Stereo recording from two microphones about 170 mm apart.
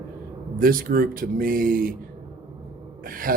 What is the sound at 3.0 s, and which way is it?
Speech, 55° right (ahead or behind).